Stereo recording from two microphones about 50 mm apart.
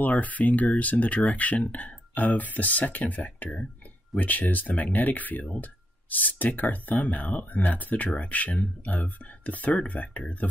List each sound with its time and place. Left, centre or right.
0.0 s speech: left